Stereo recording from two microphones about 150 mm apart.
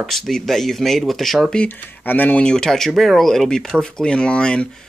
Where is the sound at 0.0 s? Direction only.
Centre (ahead or behind).